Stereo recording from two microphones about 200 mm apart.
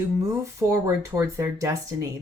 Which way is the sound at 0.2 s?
15° right (ahead or behind).